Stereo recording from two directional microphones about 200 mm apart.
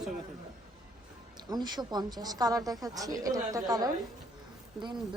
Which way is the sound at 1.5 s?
20° right (ahead or behind).